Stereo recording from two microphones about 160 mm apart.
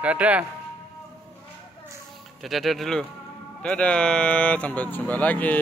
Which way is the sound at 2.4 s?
Centre (ahead or behind).